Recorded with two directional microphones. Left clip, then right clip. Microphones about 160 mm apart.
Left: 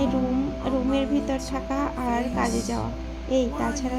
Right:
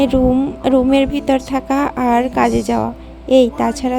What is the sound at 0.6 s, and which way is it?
A woman's voice, 65° right (ahead or behind).